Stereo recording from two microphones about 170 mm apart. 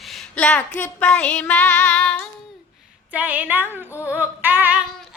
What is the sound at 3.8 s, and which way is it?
Female singing, 15° left (ahead or behind).